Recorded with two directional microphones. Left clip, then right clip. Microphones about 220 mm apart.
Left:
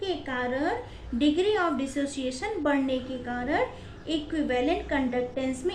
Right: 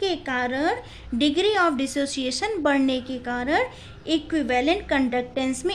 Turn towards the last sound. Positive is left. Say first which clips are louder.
# right 3 dB
turn(degrees=-50)  # may be behind; listen again after turning